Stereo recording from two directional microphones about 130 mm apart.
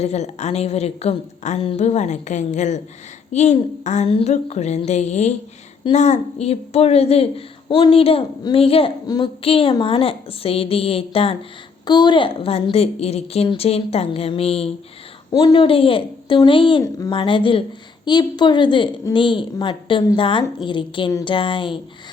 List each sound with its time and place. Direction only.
0.0 s a woman's voice: 55° left (ahead or behind)
9.0 s a woman's voice: 30° left (ahead or behind)
9.4 s a woman's voice: 45° left (ahead or behind)
11.9 s a woman's voice: 35° left (ahead or behind)
15.3 s a woman's voice: 30° left (ahead or behind)
15.6 s a woman's voice: 45° left (ahead or behind)